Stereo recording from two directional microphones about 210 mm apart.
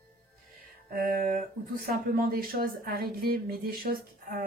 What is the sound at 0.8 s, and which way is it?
Speech, 40° right (ahead or behind).